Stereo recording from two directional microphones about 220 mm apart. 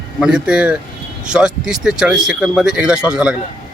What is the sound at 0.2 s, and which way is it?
Speech, 5° right (ahead or behind).